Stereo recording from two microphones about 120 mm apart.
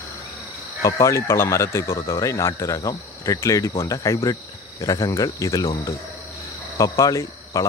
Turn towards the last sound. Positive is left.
turn(degrees=25)  # may be behind; listen again after turning